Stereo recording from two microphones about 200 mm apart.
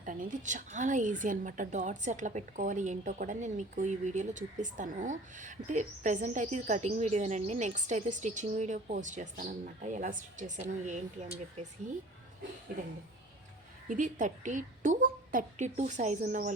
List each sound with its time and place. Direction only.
0.0 s a woman's voice: 40° right (ahead or behind)
13.8 s a woman's voice: 40° right (ahead or behind)